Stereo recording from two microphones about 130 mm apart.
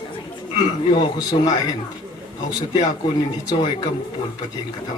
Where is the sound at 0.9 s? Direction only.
35° left (ahead or behind).